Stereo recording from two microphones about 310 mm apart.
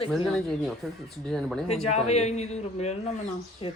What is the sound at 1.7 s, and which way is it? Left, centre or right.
A man's voice, centre.